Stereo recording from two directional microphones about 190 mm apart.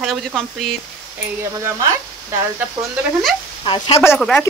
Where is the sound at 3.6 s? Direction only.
25° left (ahead or behind).